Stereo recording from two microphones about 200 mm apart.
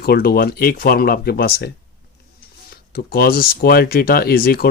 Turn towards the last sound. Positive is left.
turn(degrees=45)  # may be behind; listen again after turning